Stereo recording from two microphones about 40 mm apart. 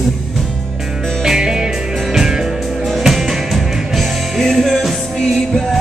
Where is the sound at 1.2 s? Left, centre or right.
Centre.